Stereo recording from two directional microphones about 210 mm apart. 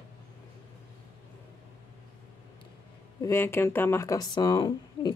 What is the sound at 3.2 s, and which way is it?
Speech, 10° left (ahead or behind).